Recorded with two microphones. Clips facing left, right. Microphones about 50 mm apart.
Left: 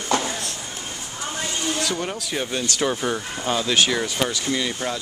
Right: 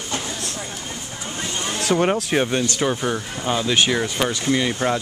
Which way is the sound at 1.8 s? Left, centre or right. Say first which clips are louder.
Right 7 dB; right.